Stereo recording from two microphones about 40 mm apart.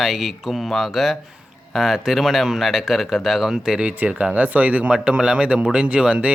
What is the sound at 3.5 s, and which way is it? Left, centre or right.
Speech, centre.